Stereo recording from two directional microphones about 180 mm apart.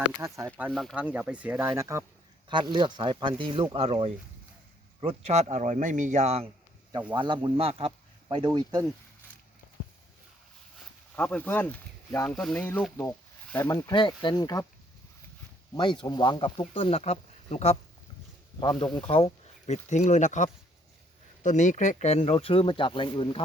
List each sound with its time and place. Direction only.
0.0 s speech: 15° right (ahead or behind)
0.7 s a man's voice: centre (ahead or behind); by 8.9 s 20° right (ahead or behind)
11.1 s speech: 5° left (ahead or behind)
13.8 s speech: 25° left (ahead or behind)
15.7 s speech: 25° left (ahead or behind)
18.6 s speech: 25° left (ahead or behind)